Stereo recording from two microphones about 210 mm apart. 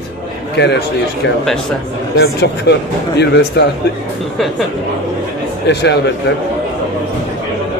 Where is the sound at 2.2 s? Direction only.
50° left (ahead or behind).